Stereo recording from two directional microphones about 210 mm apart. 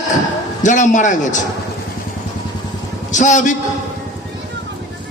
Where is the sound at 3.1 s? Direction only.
35° left (ahead or behind).